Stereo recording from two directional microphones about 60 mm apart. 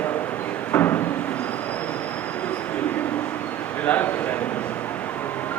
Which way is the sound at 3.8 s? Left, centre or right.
Left.